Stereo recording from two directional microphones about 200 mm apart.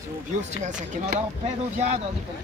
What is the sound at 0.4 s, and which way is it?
Speech, 35° right (ahead or behind).